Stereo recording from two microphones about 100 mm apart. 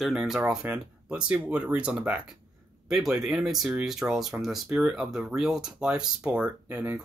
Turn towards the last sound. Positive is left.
turn(degrees=-10)  # may be behind; listen again after turning